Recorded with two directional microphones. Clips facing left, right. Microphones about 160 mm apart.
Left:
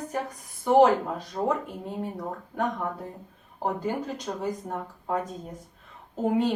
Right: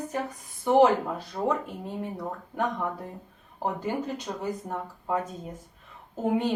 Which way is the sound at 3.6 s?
Centre (ahead or behind).